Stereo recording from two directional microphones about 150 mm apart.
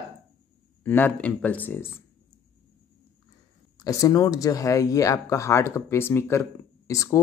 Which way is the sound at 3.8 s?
25° left (ahead or behind).